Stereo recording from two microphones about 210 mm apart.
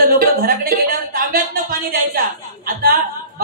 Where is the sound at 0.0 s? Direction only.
45° right (ahead or behind).